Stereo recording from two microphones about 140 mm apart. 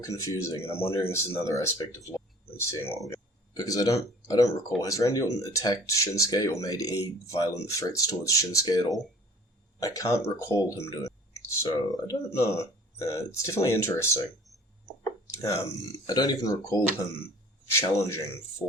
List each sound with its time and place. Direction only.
0.0 s speech: 20° left (ahead or behind)
15.4 s speech: 25° left (ahead or behind)